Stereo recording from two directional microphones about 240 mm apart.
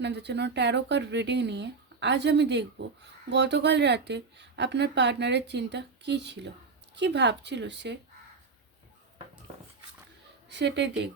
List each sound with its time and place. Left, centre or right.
0.0 s speech: right
10.5 s speech: right